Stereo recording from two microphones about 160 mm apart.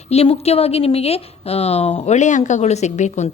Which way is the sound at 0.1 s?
40° left (ahead or behind).